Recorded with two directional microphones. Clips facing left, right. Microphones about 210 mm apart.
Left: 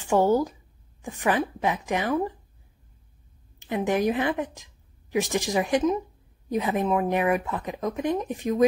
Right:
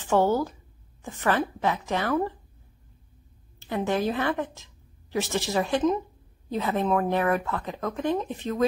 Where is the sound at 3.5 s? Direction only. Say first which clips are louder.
Left 2 dB; 15° left (ahead or behind).